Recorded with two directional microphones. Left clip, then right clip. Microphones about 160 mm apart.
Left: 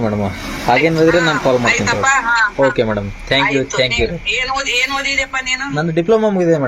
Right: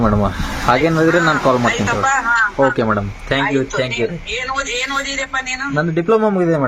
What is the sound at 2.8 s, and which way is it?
Speech, 20° right (ahead or behind).